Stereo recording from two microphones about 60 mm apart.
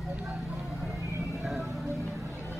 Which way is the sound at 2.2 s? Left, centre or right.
Right.